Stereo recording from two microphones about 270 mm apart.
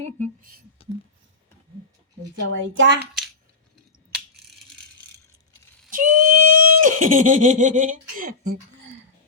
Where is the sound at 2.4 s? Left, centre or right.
Right.